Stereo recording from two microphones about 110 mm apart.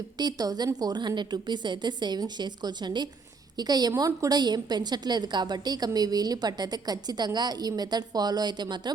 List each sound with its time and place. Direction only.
0.2 s a woman's voice: 35° right (ahead or behind)